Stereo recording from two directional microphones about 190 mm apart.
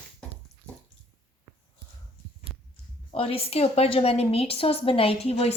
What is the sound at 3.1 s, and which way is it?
A woman's voice, 30° left (ahead or behind).